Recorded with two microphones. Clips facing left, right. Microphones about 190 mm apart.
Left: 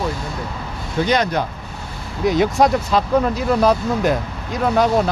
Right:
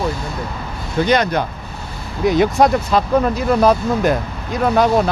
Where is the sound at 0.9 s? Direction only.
60° right (ahead or behind).